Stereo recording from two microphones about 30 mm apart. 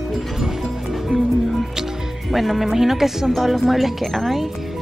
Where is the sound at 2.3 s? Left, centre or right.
Centre.